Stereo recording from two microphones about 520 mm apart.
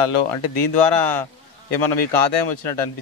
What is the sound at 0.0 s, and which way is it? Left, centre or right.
Speech, left.